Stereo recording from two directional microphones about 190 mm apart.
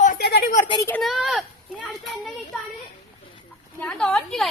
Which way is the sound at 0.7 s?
20° left (ahead or behind).